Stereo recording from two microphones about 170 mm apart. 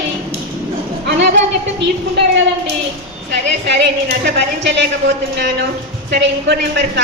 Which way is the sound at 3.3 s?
90° right.